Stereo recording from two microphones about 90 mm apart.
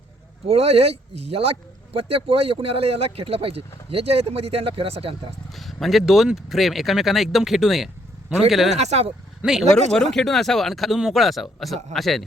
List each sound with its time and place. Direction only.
0.4 s speech: 90° right
5.5 s speech: centre (ahead or behind)